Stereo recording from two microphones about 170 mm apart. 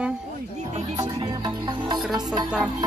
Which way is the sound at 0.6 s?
40° right (ahead or behind).